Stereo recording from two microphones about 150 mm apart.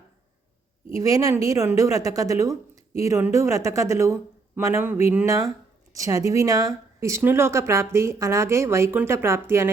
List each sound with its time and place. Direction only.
0.9 s speech: 20° right (ahead or behind)